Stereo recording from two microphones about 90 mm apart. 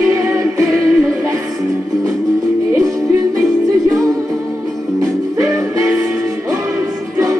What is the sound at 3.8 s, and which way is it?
Music, 40° right (ahead or behind).